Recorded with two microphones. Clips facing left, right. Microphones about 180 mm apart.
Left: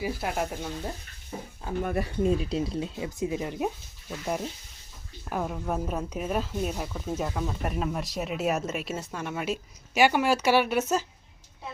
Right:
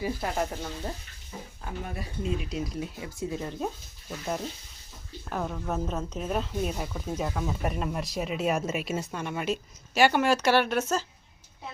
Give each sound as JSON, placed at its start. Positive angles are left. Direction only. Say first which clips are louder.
{"t": 0.0, "sound": "speech", "louder": "even", "side_deg": 5}
{"t": 1.8, "sound": "speech", "louder": "left 9 dB", "side_deg": 55}
{"t": 2.4, "sound": "speech", "louder": "left 4 dB", "side_deg": 30}
{"t": 5.3, "sound": "speech", "louder": "left 1 dB", "side_deg": 10}